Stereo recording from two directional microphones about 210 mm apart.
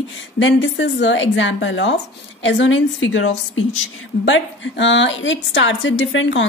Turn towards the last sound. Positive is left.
turn(degrees=60)  # may be behind; listen again after turning